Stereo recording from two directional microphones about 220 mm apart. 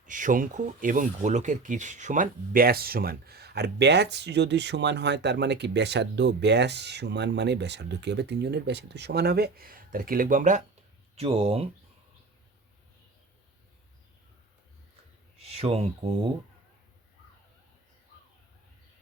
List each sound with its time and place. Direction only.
0.0 s speech: 35° right (ahead or behind)
15.4 s speech: 25° right (ahead or behind)